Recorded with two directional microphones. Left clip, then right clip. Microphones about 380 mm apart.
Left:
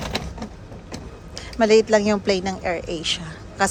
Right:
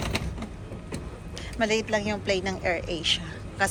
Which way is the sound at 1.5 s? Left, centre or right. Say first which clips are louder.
Left 10 dB; centre.